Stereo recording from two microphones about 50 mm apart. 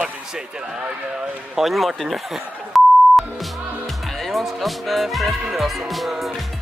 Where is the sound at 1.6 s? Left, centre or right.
Centre.